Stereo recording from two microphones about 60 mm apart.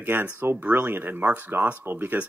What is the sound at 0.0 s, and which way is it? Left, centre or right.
Speech, right.